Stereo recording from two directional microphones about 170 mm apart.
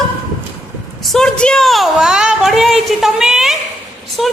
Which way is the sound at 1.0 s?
Centre (ahead or behind).